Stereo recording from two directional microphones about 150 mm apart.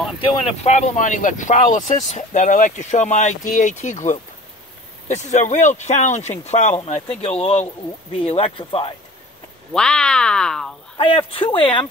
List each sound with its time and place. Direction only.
0.2 s speech: 35° left (ahead or behind)
9.8 s speech: 5° left (ahead or behind)
11.0 s speech: 35° left (ahead or behind)